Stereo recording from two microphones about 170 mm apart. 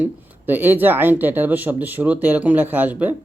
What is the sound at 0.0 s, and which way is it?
Speech, 10° right (ahead or behind).